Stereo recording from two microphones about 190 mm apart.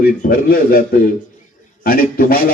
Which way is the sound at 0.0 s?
50° left (ahead or behind).